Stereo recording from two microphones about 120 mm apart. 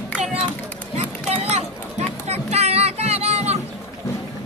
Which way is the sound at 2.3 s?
65° right (ahead or behind).